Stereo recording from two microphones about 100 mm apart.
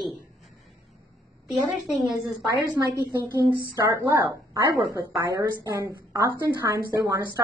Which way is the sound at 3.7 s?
40° right (ahead or behind).